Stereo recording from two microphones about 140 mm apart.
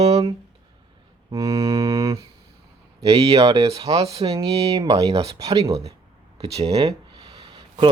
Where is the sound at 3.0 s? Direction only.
45° right (ahead or behind).